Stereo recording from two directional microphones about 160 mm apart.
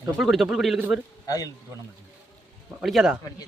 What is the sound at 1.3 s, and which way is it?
Speech, 20° left (ahead or behind).